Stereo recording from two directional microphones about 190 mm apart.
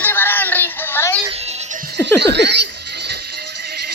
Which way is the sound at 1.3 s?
35° right (ahead or behind).